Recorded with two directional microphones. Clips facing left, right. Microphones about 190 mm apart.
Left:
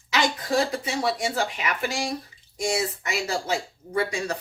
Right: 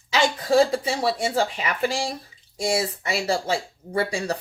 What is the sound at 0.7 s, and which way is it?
Speech, 30° right (ahead or behind).